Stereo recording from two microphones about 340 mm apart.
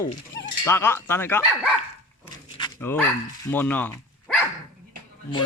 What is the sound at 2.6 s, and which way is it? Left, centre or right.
Dog, centre.